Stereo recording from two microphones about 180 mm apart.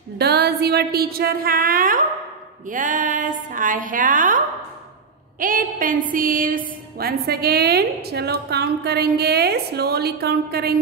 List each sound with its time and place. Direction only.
0.2 s a woman's voice: 65° right (ahead or behind); by 4.4 s 45° right (ahead or behind)
5.4 s a woman's voice: 50° right (ahead or behind)